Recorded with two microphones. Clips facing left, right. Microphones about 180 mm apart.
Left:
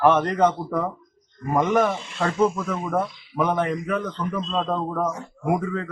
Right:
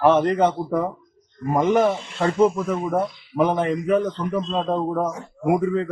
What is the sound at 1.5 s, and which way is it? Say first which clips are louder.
Speech: right 2 dB; 25° right (ahead or behind).